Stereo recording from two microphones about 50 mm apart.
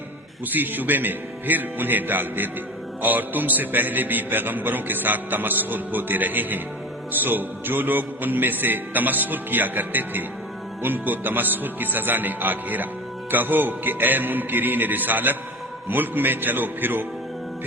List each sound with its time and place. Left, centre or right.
0.4 s a man's voice: right